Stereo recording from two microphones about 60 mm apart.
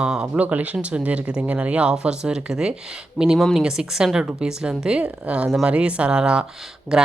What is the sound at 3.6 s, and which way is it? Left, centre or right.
Speech, centre.